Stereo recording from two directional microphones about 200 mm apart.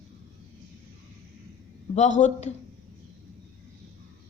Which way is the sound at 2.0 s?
35° left (ahead or behind).